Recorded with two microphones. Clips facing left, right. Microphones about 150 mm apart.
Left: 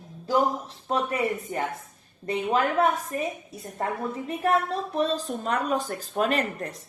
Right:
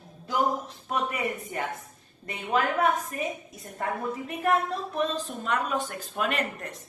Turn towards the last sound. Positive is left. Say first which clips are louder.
# left 4 dB
turn(degrees=35)  # may be behind; listen again after turning